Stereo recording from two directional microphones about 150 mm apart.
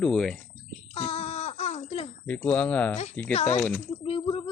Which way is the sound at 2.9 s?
45° left (ahead or behind).